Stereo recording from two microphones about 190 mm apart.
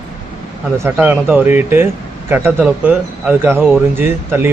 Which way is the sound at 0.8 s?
10° right (ahead or behind).